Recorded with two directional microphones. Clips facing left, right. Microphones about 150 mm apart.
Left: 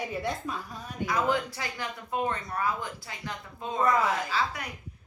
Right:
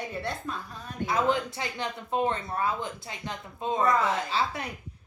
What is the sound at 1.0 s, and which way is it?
Speech, 25° right (ahead or behind).